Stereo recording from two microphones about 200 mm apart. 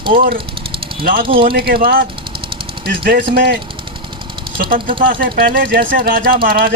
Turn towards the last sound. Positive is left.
turn(degrees=-45)  # may be behind; listen again after turning